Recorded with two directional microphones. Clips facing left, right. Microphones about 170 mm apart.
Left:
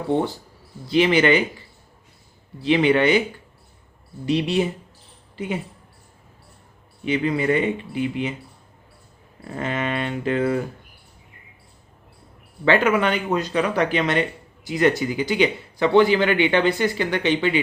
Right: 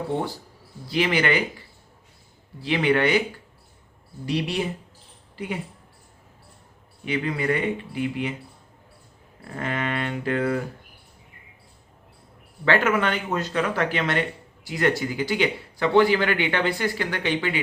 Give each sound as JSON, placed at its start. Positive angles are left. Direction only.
{"t": 0.9, "sound": "speech", "side_deg": 20}
{"t": 2.6, "sound": "speech", "side_deg": 20}
{"t": 4.3, "sound": "speech", "side_deg": 25}
{"t": 7.0, "sound": "speech", "side_deg": 20}
{"t": 9.6, "sound": "speech", "side_deg": 20}
{"t": 12.6, "sound": "speech", "side_deg": 15}